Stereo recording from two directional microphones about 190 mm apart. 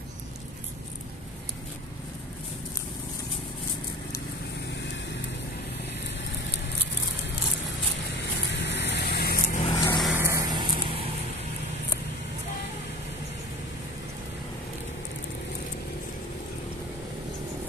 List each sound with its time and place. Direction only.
8.5 s vehicle: 65° left (ahead or behind)
9.6 s vehicle: 25° left (ahead or behind)
10.1 s a sound: 15° right (ahead or behind)